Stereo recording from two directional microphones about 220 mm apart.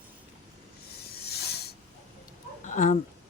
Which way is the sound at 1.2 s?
45° left (ahead or behind).